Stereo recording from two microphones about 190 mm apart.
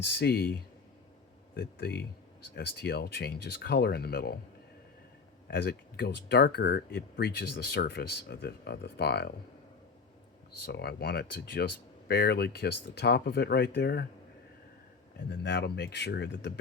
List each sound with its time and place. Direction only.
0.0 s speech: 60° left (ahead or behind)
5.5 s speech: 55° left (ahead or behind)
10.7 s speech: 60° left (ahead or behind)
15.3 s speech: 60° left (ahead or behind)